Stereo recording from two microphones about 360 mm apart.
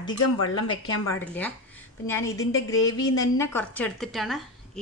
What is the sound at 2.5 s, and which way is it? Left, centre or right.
Cutlery, left.